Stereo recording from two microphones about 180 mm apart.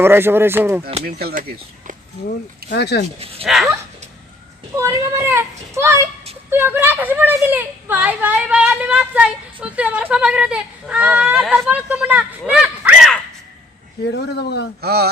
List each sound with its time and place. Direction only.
0.0 s a woman's voice: 10° right (ahead or behind)
1.0 s speech: 55° right (ahead or behind)
2.7 s a man's voice: 70° left (ahead or behind)
3.4 s speech: centre (ahead or behind)
4.8 s a woman's voice: 15° right (ahead or behind)
14.1 s a man's voice: 65° left (ahead or behind)
14.8 s speech: 60° right (ahead or behind)